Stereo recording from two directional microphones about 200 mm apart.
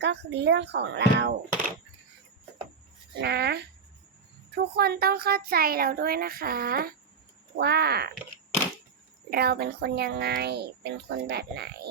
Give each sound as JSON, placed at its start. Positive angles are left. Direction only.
{"t": 0.0, "sound": "a child's voice", "side_deg": -60}
{"t": 3.2, "sound": "a child's voice", "side_deg": -55}
{"t": 9.3, "sound": "a child's voice", "side_deg": -50}